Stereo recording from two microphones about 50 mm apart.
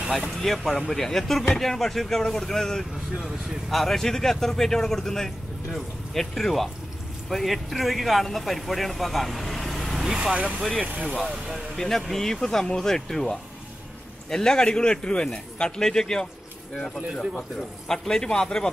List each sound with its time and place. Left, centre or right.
0.3 s speech: centre
3.2 s speech: centre
3.7 s speech: centre
10.1 s speech: centre
11.7 s speech: centre
17.1 s speech: centre
17.8 s speech: centre